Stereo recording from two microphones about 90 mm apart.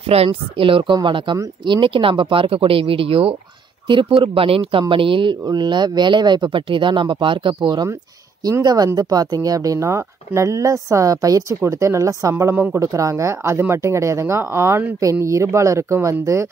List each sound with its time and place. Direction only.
0.2 s speech: 75° right (ahead or behind)
0.9 s speech: 60° right (ahead or behind); by 3.3 s 90° right
3.8 s speech: 60° right (ahead or behind)
4.2 s speech: 90° right; by 7.5 s 65° right (ahead or behind)
7.6 s speech: 45° right (ahead or behind)